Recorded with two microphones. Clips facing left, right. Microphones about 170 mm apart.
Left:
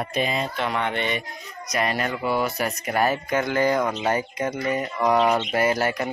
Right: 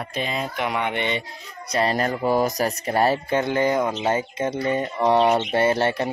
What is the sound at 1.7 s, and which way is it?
Speech, 30° right (ahead or behind).